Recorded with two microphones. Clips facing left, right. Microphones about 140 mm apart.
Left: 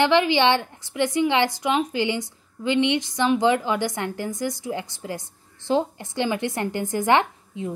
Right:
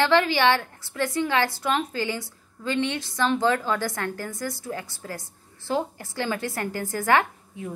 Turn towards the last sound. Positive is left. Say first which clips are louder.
# left 2 dB
turn(degrees=20)  # may be behind; listen again after turning